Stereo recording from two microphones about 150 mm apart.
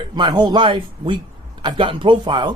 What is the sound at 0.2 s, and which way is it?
Speech, 25° right (ahead or behind).